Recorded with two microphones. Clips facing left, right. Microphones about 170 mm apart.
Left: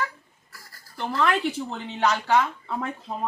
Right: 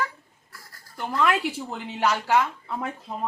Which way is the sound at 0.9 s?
10° right (ahead or behind).